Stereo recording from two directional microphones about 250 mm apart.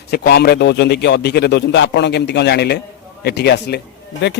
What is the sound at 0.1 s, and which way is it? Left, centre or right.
A man's voice, left.